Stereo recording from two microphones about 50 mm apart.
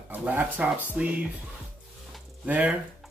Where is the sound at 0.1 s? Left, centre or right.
Right.